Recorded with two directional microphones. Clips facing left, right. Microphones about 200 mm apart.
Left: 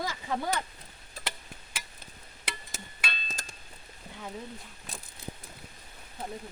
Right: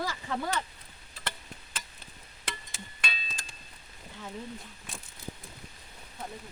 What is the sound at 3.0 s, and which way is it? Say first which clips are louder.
Tick-tock: even; 5° right (ahead or behind).